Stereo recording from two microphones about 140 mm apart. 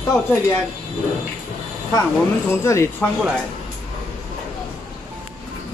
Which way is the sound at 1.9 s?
20° left (ahead or behind).